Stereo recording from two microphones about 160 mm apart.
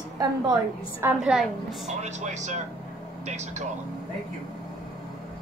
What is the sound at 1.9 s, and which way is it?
Speech, 45° right (ahead or behind).